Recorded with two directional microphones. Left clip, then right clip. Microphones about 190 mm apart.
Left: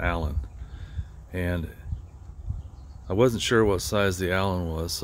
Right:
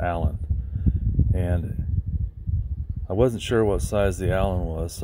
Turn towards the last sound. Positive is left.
turn(degrees=0)  # may be behind; listen again after turning